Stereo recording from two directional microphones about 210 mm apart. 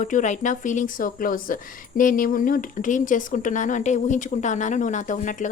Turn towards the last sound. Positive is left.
turn(degrees=40)  # may be behind; listen again after turning